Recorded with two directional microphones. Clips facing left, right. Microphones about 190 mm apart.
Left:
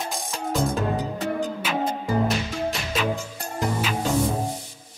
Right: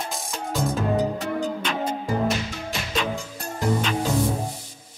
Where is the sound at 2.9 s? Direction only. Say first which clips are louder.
Even; 5° left (ahead or behind).